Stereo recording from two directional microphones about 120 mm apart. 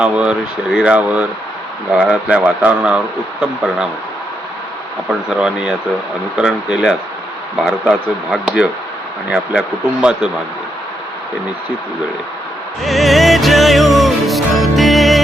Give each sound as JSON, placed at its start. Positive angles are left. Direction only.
{"t": 0.0, "sound": "speech", "side_deg": -10}
{"t": 5.4, "sound": "speech", "side_deg": -5}
{"t": 12.8, "sound": "music", "side_deg": 0}